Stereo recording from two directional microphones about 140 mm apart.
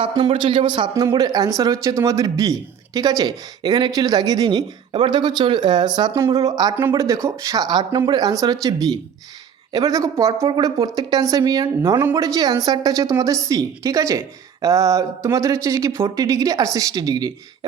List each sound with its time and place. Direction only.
0.3 s a man's voice: 35° right (ahead or behind)
9.7 s speech: 25° right (ahead or behind)